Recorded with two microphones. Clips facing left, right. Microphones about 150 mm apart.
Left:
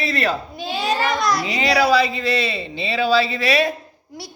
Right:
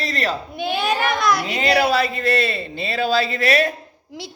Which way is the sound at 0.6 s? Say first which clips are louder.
Right 4 dB; 60° right (ahead or behind).